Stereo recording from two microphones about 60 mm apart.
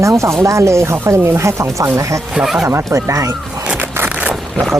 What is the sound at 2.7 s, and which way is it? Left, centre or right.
Speech, right.